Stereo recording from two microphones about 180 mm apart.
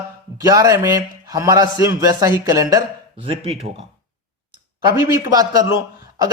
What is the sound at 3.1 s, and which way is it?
Speech, 30° right (ahead or behind).